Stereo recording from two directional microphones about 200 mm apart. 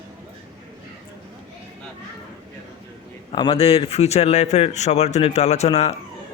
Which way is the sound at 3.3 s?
25° left (ahead or behind).